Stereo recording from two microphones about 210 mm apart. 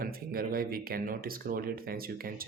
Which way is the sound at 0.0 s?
45° right (ahead or behind).